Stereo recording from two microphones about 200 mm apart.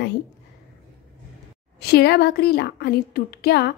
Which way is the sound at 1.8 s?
55° left (ahead or behind).